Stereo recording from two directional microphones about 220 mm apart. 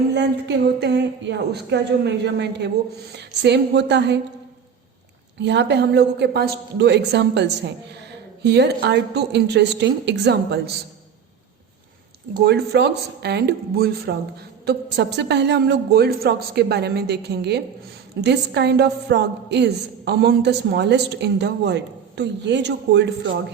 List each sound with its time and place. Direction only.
0.1 s a woman's voice: 50° right (ahead or behind)
5.4 s a woman's voice: 50° right (ahead or behind)
12.4 s a woman's voice: 50° right (ahead or behind)